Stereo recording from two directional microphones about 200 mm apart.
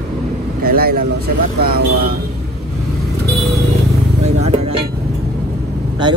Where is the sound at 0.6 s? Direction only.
50° right (ahead or behind).